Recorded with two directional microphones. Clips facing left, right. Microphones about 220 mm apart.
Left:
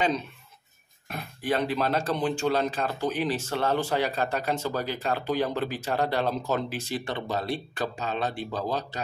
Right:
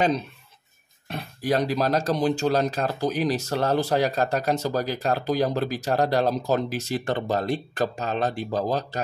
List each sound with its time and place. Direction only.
1.0 s speech: 35° right (ahead or behind)